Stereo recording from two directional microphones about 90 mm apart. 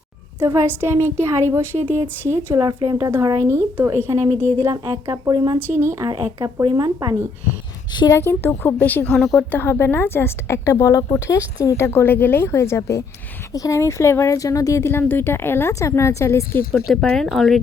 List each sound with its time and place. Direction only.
0.3 s a woman's voice: 30° right (ahead or behind)
2.6 s speech: 50° right (ahead or behind); by 6.1 s 30° right (ahead or behind)
6.1 s speech: 55° right (ahead or behind)
8.1 s a woman's voice: 25° left (ahead or behind)
9.0 s a woman's voice: 5° left (ahead or behind)
9.5 s a woman's voice: 25° left (ahead or behind)
16.9 s a woman's voice: 5° left (ahead or behind)